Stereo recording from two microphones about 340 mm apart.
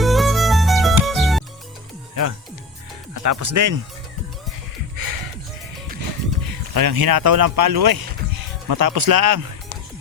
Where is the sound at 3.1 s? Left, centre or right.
Right.